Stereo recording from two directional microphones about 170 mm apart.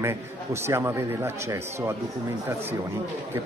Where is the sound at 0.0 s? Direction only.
15° right (ahead or behind).